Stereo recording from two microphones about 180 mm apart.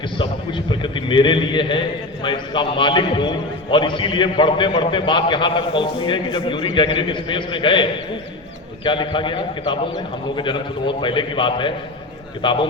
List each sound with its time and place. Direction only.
0.2 s a man's voice: 25° left (ahead or behind)